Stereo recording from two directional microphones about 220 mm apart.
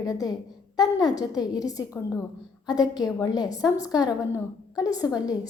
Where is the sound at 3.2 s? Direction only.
15° left (ahead or behind).